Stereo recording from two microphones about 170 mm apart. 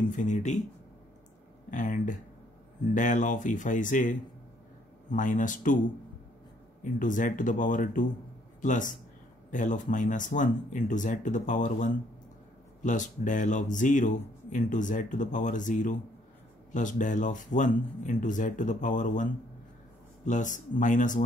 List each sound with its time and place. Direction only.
0.1 s a man's voice: 45° left (ahead or behind)
1.7 s a man's voice: 50° left (ahead or behind)
6.8 s a man's voice: 50° left (ahead or behind)
20.2 s a man's voice: 45° left (ahead or behind)